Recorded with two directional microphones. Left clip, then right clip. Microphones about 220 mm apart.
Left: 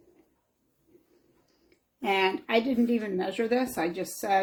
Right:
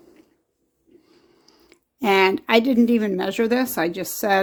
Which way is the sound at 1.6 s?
50° right (ahead or behind).